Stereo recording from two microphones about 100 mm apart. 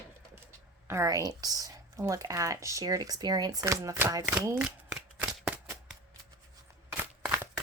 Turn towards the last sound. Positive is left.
turn(degrees=-20)  # may be behind; listen again after turning